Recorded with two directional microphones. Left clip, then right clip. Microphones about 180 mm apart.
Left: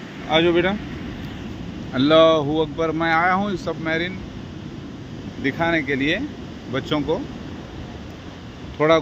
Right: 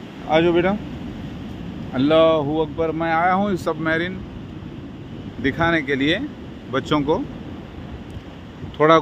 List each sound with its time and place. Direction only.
0.3 s speech: 15° right (ahead or behind)
2.0 s speech: centre (ahead or behind)
3.2 s speech: 20° right (ahead or behind)
5.4 s speech: 25° right (ahead or behind)
8.7 s speech: 40° right (ahead or behind)